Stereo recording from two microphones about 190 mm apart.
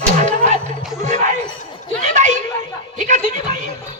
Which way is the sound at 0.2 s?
40° right (ahead or behind).